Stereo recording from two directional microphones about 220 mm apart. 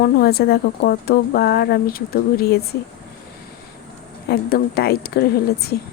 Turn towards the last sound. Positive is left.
turn(degrees=45)  # may be behind; listen again after turning